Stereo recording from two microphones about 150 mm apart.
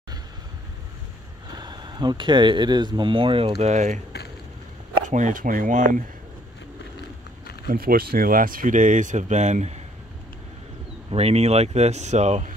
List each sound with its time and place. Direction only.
1.6 s speech: 30° right (ahead or behind); by 4.0 s 50° right (ahead or behind)
5.1 s speech: 60° right (ahead or behind)
7.7 s speech: 85° right; by 9.8 s 50° right (ahead or behind)
11.1 s speech: 40° right (ahead or behind)